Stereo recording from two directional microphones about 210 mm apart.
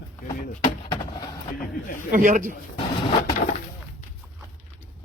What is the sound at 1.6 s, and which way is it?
Speech, 40° left (ahead or behind).